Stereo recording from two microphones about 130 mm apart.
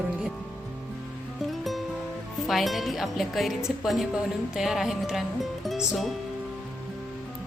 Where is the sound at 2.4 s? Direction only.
Centre (ahead or behind).